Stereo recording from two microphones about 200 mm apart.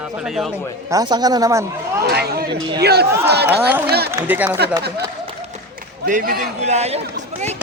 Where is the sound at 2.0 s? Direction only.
55° right (ahead or behind).